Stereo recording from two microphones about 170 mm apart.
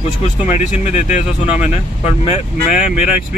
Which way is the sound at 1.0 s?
40° left (ahead or behind).